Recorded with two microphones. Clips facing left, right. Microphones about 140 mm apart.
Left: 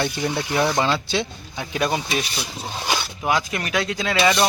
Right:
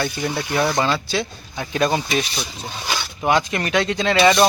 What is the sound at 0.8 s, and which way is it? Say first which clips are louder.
Speech: right 1 dB; 20° left (ahead or behind).